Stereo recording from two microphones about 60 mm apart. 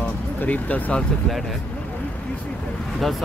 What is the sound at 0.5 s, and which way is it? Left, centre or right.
Speech, left.